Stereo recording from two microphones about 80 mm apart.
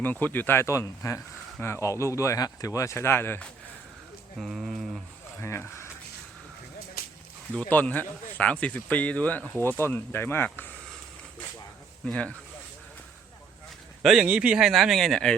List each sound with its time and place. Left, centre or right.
0.0 s speech: left
4.4 s speech: centre
5.4 s speech: left
7.7 s speech: left
9.5 s speech: left
12.0 s speech: centre
14.2 s speech: centre